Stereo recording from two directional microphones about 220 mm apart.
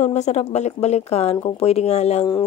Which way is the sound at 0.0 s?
30° left (ahead or behind).